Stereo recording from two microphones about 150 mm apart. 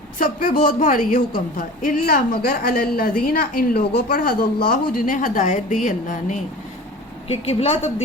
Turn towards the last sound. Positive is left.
turn(degrees=45)  # may be behind; listen again after turning